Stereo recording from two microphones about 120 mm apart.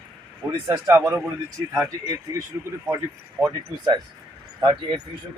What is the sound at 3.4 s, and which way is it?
Speech, 35° right (ahead or behind).